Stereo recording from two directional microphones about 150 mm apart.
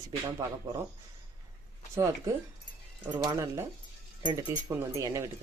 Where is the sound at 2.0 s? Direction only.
20° right (ahead or behind).